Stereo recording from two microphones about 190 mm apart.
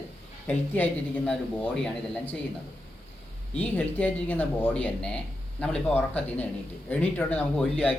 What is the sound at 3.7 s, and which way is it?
Speech, 5° left (ahead or behind).